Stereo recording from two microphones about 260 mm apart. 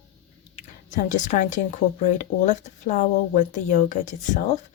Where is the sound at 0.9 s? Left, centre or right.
Left.